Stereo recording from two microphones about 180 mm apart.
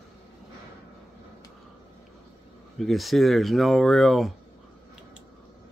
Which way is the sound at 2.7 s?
Centre (ahead or behind).